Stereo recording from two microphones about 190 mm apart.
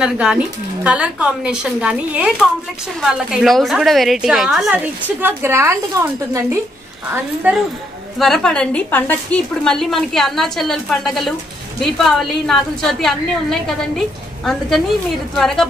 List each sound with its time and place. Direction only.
0.0 s a woman's voice: 5° right (ahead or behind)
8.2 s a woman's voice: centre (ahead or behind)